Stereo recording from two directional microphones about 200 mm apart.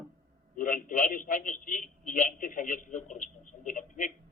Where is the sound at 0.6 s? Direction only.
40° left (ahead or behind).